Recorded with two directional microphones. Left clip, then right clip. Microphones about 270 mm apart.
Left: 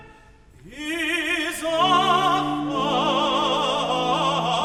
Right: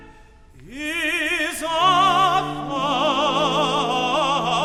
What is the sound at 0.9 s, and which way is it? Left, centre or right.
Opera, right.